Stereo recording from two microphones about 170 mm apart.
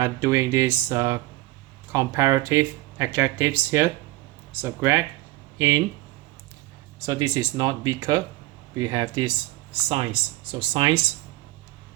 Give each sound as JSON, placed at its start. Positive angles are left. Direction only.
{"t": 0.0, "sound": "speech", "side_deg": -15}
{"t": 7.0, "sound": "speech", "side_deg": -20}
{"t": 9.9, "sound": "speech", "side_deg": -35}